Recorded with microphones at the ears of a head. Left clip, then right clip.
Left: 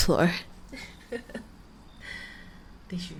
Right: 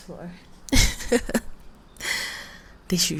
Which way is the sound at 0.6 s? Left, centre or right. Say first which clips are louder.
Right 17 dB; right.